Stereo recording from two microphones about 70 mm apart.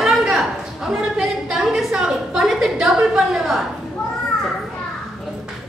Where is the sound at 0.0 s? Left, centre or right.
Centre.